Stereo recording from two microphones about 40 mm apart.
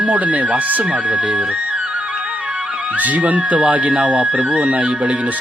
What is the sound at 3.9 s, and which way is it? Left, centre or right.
Speech, right.